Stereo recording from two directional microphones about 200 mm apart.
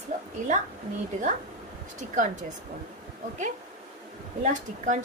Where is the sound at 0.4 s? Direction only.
40° right (ahead or behind).